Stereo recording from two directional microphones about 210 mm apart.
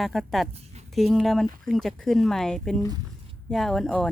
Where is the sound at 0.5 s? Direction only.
30° right (ahead or behind).